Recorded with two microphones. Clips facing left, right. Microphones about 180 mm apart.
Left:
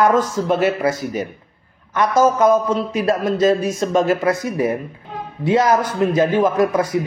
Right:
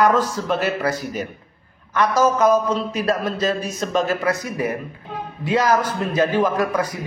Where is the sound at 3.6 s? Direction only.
25° left (ahead or behind).